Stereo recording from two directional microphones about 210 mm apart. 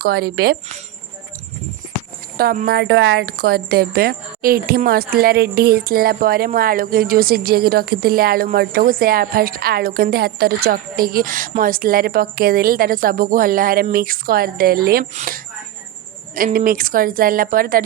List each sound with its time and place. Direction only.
0.0 s a woman's voice: 45° right (ahead or behind)
2.4 s a woman's voice: 45° right (ahead or behind)